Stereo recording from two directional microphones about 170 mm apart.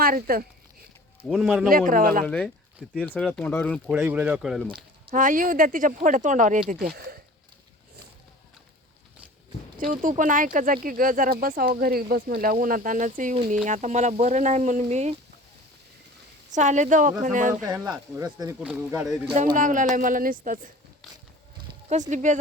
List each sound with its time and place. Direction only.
0.0 s speech: 60° right (ahead or behind)
1.3 s a man's voice: 5° right (ahead or behind)
1.9 s speech: 55° right (ahead or behind)
2.2 s speech: 5° left (ahead or behind)
3.9 s speech: 10° right (ahead or behind)
5.1 s speech: 50° right (ahead or behind)
9.7 s speech: 50° right (ahead or behind)
16.5 s speech: 45° right (ahead or behind)
17.7 s speech: 20° right (ahead or behind)
18.6 s speech: 10° right (ahead or behind)
19.5 s speech: 50° right (ahead or behind)
22.1 s speech: 45° right (ahead or behind)